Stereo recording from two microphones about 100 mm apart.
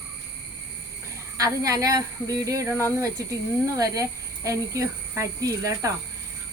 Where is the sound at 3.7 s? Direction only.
35° right (ahead or behind).